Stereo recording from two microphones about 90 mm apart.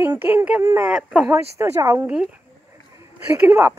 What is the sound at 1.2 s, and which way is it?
Speech, 30° right (ahead or behind).